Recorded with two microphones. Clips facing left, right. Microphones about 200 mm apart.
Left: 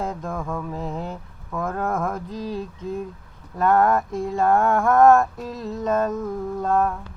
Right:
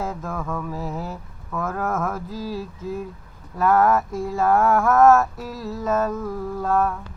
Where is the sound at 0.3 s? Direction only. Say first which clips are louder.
Even; 15° left (ahead or behind).